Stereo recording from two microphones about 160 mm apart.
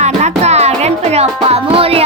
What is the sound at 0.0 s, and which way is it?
Music, 45° right (ahead or behind).